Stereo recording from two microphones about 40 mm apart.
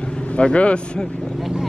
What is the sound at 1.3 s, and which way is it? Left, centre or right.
Vehicle, centre.